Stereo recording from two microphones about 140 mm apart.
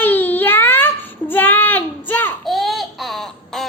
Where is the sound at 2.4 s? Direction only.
Centre (ahead or behind).